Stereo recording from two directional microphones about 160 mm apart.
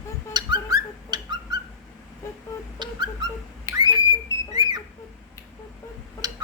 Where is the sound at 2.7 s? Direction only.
30° right (ahead or behind).